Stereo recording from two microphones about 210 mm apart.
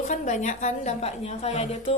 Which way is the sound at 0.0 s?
35° left (ahead or behind).